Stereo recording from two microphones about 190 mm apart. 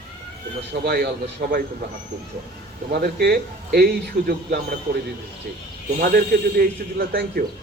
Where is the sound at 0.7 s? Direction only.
60° right (ahead or behind).